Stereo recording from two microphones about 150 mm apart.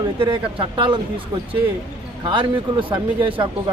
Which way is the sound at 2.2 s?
35° right (ahead or behind).